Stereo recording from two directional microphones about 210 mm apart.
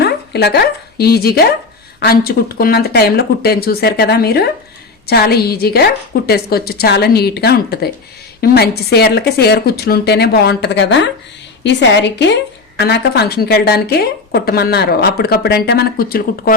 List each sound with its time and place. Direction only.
0.0 s a woman's voice: 50° left (ahead or behind)